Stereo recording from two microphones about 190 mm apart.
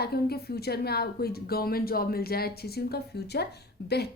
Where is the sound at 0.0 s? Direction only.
55° left (ahead or behind).